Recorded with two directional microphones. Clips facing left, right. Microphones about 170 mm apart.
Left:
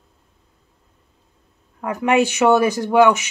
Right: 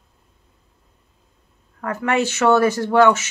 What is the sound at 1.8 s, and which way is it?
Speech, 15° left (ahead or behind).